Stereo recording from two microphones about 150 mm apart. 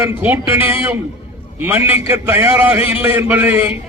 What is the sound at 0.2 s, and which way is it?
A man's voice, 15° right (ahead or behind).